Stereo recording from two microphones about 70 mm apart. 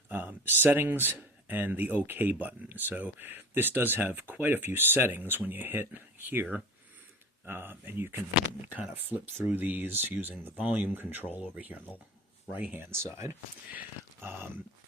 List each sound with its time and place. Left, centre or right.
0.1 s speech: right
8.6 s speech: right
12.8 s speech: right